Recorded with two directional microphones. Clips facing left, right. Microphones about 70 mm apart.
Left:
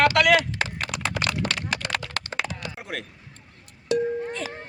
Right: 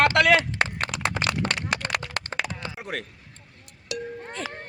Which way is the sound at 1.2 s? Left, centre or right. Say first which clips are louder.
Left 1 dB; right.